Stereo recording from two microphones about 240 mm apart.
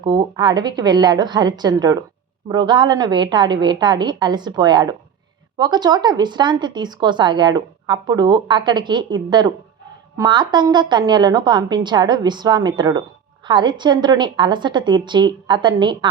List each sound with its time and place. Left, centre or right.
0.0 s a woman's voice: centre